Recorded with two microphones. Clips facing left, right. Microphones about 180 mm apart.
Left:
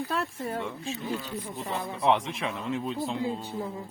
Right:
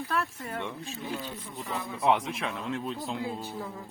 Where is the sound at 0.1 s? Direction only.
25° left (ahead or behind).